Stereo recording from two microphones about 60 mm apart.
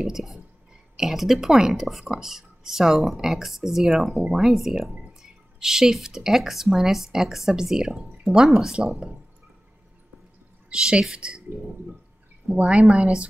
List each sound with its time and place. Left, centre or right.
0.0 s speech: centre
10.7 s speech: centre